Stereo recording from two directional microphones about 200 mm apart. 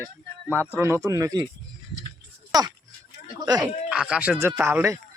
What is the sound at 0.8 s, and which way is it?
Speech, 10° right (ahead or behind).